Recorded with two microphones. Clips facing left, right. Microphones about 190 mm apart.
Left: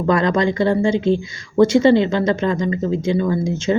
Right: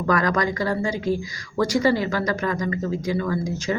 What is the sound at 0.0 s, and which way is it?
A woman's voice, 25° left (ahead or behind).